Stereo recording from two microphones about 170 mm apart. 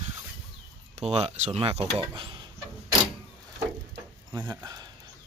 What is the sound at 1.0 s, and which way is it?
Speech, 40° right (ahead or behind).